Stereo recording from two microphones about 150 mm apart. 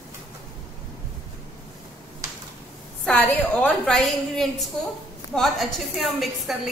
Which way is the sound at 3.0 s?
10° left (ahead or behind).